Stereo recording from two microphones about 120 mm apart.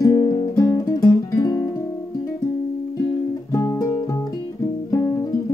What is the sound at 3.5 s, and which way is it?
Music, 25° left (ahead or behind).